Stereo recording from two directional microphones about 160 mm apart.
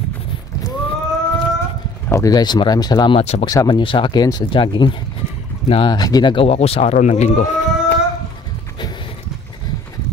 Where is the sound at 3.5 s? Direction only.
25° left (ahead or behind); by 7.5 s 45° left (ahead or behind).